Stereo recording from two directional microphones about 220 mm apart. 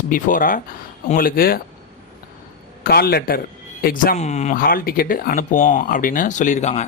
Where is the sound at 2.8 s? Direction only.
45° left (ahead or behind).